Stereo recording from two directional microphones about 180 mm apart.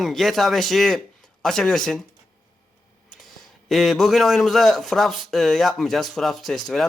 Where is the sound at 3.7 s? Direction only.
Centre (ahead or behind).